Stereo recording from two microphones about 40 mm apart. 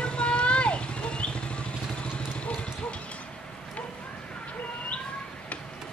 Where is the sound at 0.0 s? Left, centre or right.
Left.